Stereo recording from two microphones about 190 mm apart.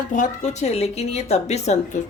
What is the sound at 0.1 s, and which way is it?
Speech, 40° left (ahead or behind).